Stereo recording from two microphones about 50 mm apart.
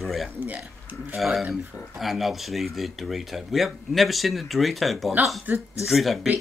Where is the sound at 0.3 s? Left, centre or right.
Right.